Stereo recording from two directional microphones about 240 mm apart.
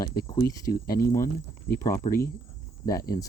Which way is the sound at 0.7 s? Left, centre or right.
Left.